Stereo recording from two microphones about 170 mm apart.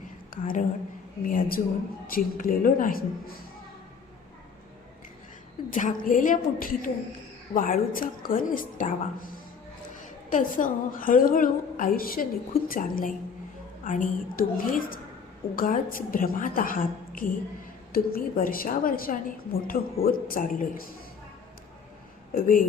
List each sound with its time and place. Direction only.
0.3 s whispering: 55° left (ahead or behind)
1.2 s a woman's voice: 55° left (ahead or behind)
5.7 s a woman's voice: 50° left (ahead or behind)
10.2 s a woman's voice: 50° left (ahead or behind)
22.3 s speech: 55° left (ahead or behind)